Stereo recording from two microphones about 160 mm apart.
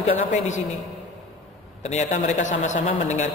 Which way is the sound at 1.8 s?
45° left (ahead or behind).